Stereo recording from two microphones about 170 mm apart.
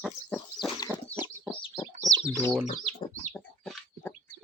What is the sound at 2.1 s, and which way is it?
Bird, 25° right (ahead or behind).